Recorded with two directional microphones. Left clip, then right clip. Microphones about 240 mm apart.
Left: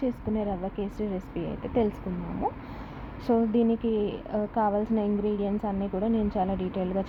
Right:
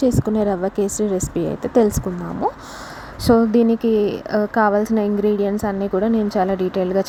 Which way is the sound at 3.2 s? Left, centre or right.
Right.